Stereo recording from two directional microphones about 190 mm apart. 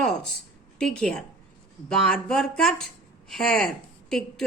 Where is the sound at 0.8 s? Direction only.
5° left (ahead or behind).